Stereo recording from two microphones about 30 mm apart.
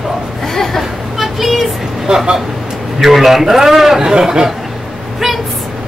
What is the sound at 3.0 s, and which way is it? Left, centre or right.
Speech, centre.